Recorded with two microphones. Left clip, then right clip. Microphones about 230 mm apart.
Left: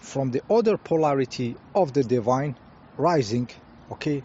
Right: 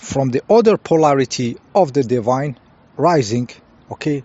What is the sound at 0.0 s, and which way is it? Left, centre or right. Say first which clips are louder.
Speech: right 8 dB; right.